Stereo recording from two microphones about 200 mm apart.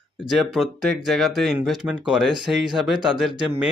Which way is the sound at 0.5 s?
Centre (ahead or behind).